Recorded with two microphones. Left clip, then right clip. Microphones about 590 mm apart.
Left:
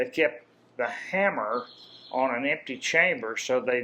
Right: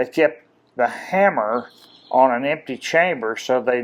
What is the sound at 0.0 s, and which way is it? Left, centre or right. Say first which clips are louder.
Speech: right 7 dB; right.